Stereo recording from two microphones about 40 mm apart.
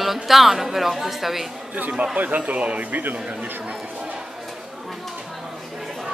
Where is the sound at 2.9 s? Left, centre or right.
Right.